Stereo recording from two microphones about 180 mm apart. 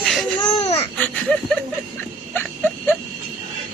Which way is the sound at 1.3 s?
5° left (ahead or behind).